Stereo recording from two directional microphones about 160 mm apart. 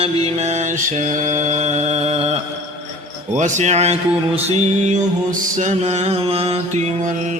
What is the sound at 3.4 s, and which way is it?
Music, 50° right (ahead or behind).